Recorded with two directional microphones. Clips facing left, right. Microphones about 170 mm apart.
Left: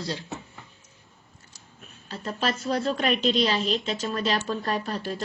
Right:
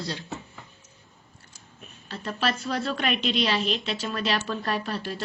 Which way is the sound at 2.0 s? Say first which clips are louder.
Even; 35° left (ahead or behind).